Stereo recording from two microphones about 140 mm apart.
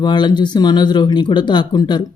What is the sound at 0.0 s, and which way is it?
A man's voice, 30° left (ahead or behind).